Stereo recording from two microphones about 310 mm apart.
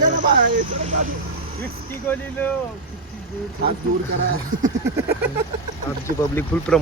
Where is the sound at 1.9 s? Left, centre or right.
Centre.